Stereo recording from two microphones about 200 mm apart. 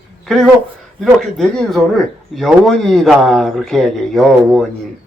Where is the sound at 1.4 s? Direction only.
Centre (ahead or behind).